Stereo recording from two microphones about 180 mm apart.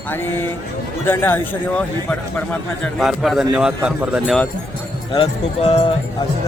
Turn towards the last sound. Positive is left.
turn(degrees=35)  # may be behind; listen again after turning